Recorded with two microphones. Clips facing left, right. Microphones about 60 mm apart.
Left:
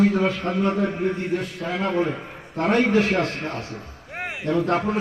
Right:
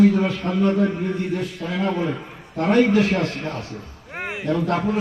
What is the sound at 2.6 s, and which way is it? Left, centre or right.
Speech, left.